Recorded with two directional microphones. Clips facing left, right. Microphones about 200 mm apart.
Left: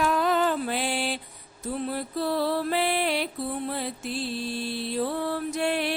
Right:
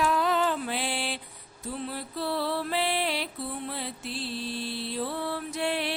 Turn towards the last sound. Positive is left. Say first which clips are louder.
# left 3 dB
turn(degrees=50)  # may be behind; listen again after turning